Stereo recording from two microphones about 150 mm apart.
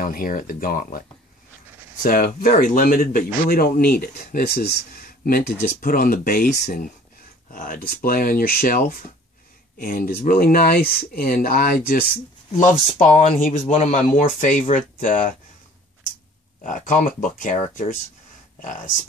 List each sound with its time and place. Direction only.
0.0 s speech: 70° left (ahead or behind)
2.0 s speech: 70° left (ahead or behind)
12.1 s speech: 60° left (ahead or behind)
16.6 s speech: 60° left (ahead or behind)